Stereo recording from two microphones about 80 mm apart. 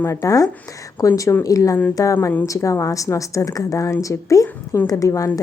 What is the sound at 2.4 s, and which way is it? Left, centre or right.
A woman's voice, left.